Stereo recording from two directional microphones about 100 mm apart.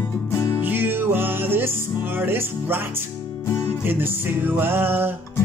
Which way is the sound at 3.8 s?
20° right (ahead or behind).